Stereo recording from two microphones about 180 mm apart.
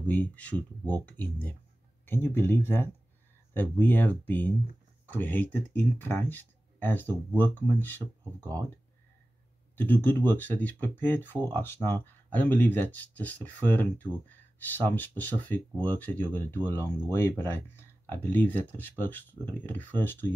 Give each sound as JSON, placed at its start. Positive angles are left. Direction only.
{"t": 0.0, "sound": "speech", "side_deg": 10}
{"t": 9.8, "sound": "speech", "side_deg": 10}